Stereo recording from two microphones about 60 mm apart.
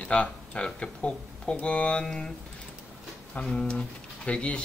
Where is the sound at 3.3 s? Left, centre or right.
Centre.